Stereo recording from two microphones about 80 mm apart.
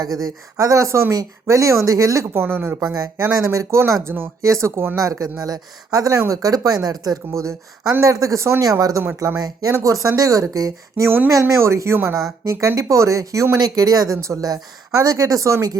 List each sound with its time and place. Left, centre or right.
0.0 s speech: right
2.3 s speech: right
3.4 s speech: right
8.8 s speech: right
9.4 s speech: right
9.7 s speech: right
13.6 s speech: right